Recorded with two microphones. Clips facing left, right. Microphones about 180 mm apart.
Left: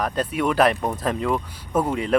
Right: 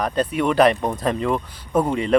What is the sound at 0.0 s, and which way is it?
Speech, 5° left (ahead or behind).